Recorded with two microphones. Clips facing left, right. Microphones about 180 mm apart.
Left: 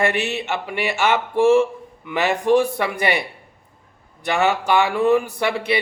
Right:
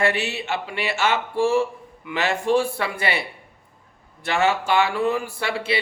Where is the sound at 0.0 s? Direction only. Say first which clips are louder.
Left 2 dB; 20° left (ahead or behind).